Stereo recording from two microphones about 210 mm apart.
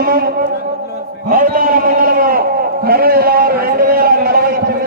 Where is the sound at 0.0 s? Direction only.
45° right (ahead or behind).